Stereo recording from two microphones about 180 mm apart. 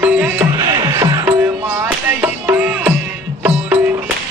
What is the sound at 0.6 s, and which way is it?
Music, 20° right (ahead or behind).